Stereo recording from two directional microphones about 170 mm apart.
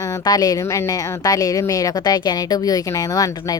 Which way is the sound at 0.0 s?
20° left (ahead or behind).